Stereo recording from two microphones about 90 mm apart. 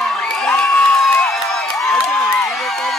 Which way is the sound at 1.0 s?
5° left (ahead or behind).